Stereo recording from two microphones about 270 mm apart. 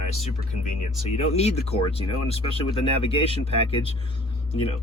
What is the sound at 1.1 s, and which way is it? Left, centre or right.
Speech, left.